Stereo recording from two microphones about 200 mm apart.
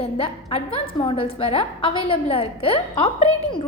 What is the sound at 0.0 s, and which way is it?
A woman's voice, 30° left (ahead or behind).